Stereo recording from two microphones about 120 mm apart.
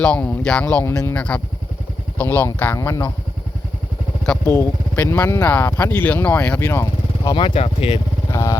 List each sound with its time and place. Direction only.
0.0 s speech: 10° left (ahead or behind)
4.9 s speech: 15° left (ahead or behind)
7.3 s speech: 55° left (ahead or behind)
8.3 s motorcycle: 25° left (ahead or behind)